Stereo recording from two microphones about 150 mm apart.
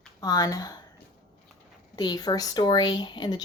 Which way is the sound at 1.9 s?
25° left (ahead or behind).